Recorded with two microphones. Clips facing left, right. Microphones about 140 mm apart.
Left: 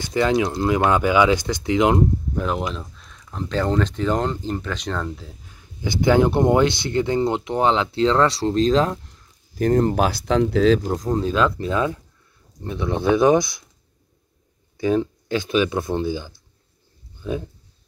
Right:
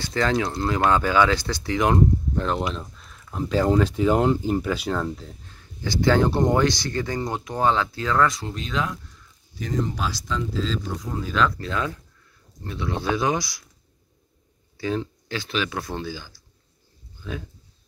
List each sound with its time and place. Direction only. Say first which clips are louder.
0.0 s speech: left 4 dB; 15° left (ahead or behind)
2.3 s speech: left 1 dB; 5° left (ahead or behind); by 9.0 s 35° left (ahead or behind)
9.6 s speech: left 9 dB; 55° left (ahead or behind)
10.9 s speech: left 8 dB; 35° left (ahead or behind); by 13.7 s 20° left (ahead or behind)
14.8 s speech: left 7 dB; 15° left (ahead or behind)